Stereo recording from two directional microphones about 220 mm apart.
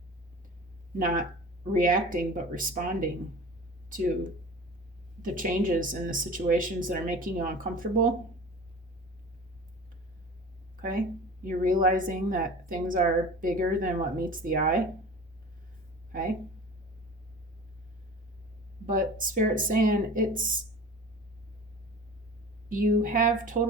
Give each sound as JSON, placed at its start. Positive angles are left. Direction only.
{"t": 0.9, "sound": "speech", "side_deg": -35}
{"t": 10.8, "sound": "a sound", "side_deg": -40}
{"t": 11.4, "sound": "speech", "side_deg": -40}
{"t": 18.9, "sound": "speech", "side_deg": -40}
{"t": 22.7, "sound": "speech", "side_deg": -40}